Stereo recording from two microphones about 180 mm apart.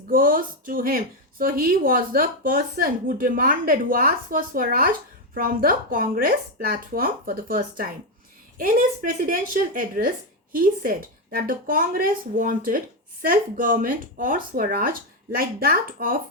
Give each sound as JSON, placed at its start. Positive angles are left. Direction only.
{"t": 0.1, "sound": "speech", "side_deg": -50}